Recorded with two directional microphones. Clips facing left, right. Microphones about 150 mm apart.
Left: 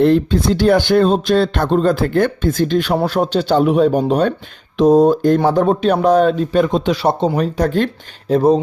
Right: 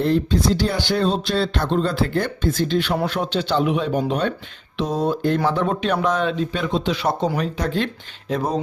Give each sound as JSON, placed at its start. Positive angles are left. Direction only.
{"t": 0.0, "sound": "speech", "side_deg": 60}
{"t": 7.0, "sound": "speech", "side_deg": 25}
{"t": 7.3, "sound": "speech", "side_deg": 40}
{"t": 8.3, "sound": "speech", "side_deg": 30}